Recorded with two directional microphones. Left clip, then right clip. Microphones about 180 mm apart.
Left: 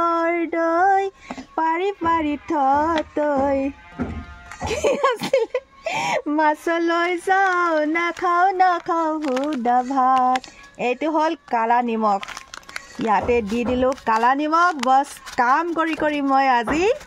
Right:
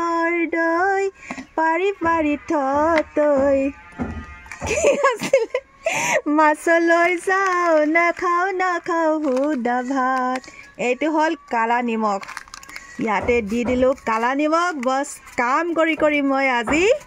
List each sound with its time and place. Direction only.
0.0 s music: 5° right (ahead or behind)
4.6 s speech: 10° right (ahead or behind)